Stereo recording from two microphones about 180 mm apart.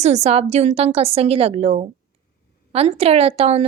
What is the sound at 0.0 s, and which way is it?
A woman's voice, 35° right (ahead or behind).